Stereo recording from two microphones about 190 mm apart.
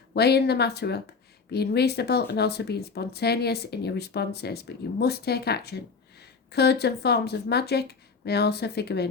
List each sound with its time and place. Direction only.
0.1 s speech: 60° left (ahead or behind)